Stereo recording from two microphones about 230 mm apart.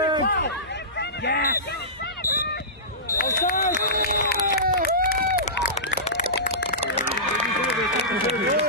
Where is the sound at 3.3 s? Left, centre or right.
Left.